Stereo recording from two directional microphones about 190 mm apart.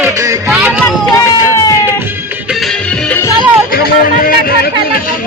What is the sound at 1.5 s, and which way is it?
Music, 20° left (ahead or behind).